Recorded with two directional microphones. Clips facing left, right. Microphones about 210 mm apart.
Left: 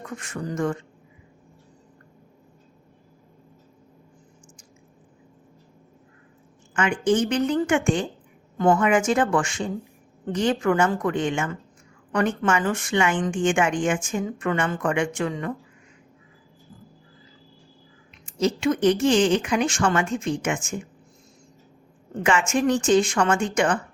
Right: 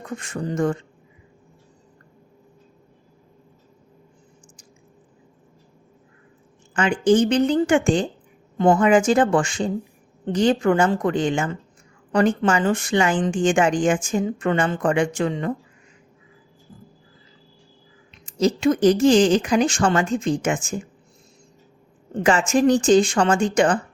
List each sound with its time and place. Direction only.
0.0 s speech: 30° right (ahead or behind)
6.7 s speech: 30° right (ahead or behind)
18.3 s speech: 40° right (ahead or behind)
22.1 s speech: 35° right (ahead or behind)